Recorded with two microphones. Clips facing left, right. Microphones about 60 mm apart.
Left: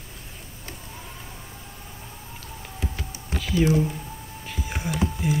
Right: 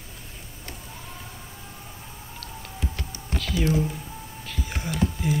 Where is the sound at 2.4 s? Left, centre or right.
Centre.